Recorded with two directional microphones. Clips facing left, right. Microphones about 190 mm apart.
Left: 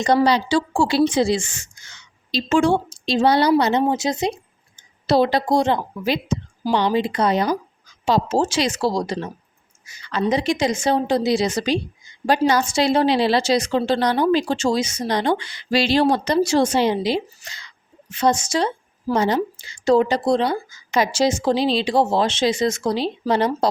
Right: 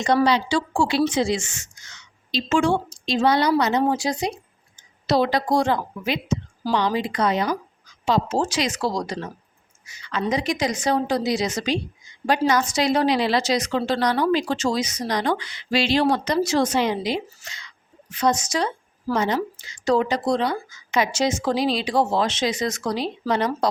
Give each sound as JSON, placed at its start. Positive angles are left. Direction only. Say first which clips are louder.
{"t": 0.3, "sound": "a woman's voice", "louder": "left 2 dB", "side_deg": 35}